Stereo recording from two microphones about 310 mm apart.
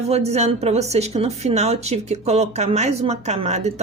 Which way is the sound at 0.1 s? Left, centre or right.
Right.